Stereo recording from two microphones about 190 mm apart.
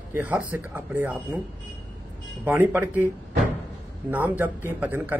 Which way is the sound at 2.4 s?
10° right (ahead or behind).